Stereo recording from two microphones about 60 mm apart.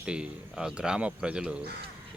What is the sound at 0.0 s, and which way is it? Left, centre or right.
Speech, centre.